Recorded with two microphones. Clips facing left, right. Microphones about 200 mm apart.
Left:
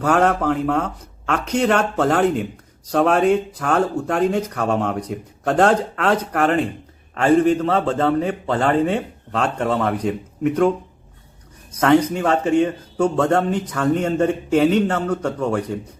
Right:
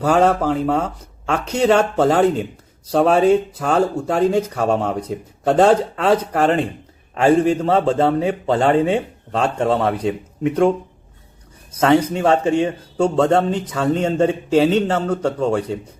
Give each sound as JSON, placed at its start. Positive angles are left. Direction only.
{"t": 0.0, "sound": "a man's voice", "side_deg": -10}
{"t": 11.7, "sound": "a man's voice", "side_deg": -10}